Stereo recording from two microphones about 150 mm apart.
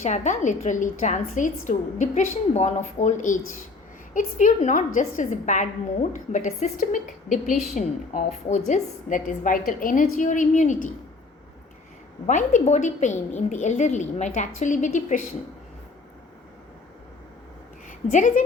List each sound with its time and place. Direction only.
0.0 s a woman's voice: 50° left (ahead or behind)
12.2 s a woman's voice: 55° left (ahead or behind)
17.8 s a woman's voice: 55° left (ahead or behind)